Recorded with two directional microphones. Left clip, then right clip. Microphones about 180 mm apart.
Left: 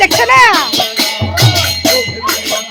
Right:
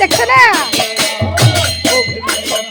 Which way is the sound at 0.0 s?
5° left (ahead or behind).